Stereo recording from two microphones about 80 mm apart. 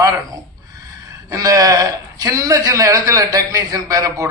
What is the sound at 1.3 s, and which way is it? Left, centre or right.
A man's voice, right.